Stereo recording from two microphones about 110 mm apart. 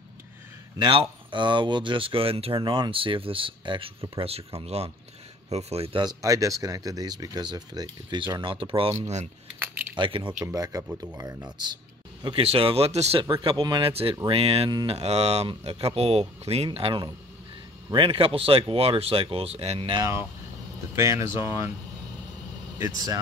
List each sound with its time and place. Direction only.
0.7 s speech: 45° right (ahead or behind)
4.1 s speech: 60° right (ahead or behind)
6.2 s speech: 30° right (ahead or behind); by 8.9 s 55° right (ahead or behind)
9.9 s speech: 50° right (ahead or behind)
10.4 s speech: 35° right (ahead or behind)
12.4 s speech: 60° right (ahead or behind)
13.2 s speech: 50° right (ahead or behind)
13.8 s speech: 60° right (ahead or behind)
14.9 s speech: 75° right (ahead or behind)
20.0 s speech: 25° right (ahead or behind)
22.8 s speech: 30° right (ahead or behind)